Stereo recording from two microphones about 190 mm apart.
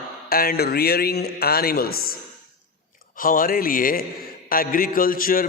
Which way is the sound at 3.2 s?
45° left (ahead or behind).